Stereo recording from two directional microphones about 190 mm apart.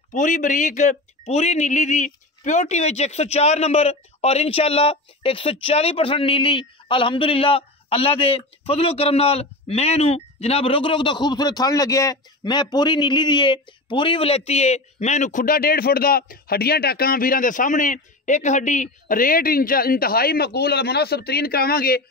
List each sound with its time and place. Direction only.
0.1 s speech: 40° left (ahead or behind)